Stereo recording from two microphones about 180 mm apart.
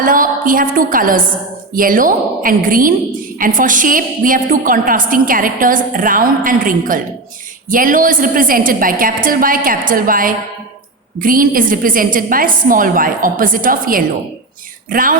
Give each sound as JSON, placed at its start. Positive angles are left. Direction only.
{"t": 0.0, "sound": "a woman's voice", "side_deg": -50}